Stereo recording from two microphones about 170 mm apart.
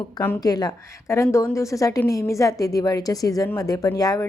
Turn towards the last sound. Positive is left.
turn(degrees=20)  # may be behind; listen again after turning